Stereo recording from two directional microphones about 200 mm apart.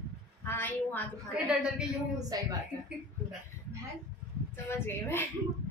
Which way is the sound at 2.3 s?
20° right (ahead or behind).